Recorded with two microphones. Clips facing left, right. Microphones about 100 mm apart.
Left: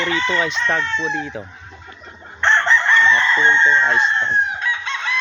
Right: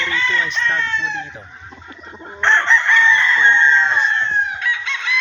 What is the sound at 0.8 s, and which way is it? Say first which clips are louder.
Speech: even; 25° left (ahead or behind).